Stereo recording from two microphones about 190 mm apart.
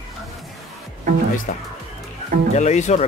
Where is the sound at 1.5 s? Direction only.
45° left (ahead or behind).